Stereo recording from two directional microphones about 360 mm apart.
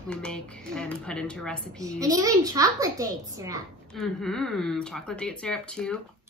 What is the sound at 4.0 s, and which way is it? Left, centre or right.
Speech, centre.